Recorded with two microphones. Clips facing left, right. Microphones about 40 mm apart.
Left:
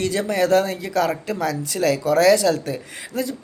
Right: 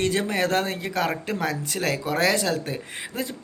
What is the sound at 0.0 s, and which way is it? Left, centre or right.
Speech, right.